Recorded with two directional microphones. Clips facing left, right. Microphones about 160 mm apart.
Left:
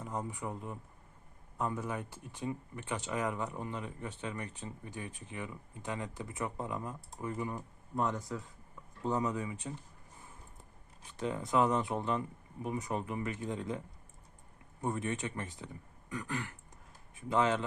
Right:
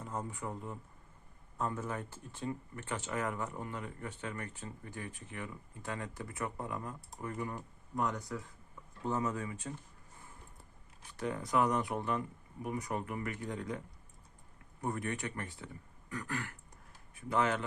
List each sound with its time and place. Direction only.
0.0 s speech: 15° left (ahead or behind)
11.2 s speech: 20° left (ahead or behind)
14.8 s speech: 20° left (ahead or behind)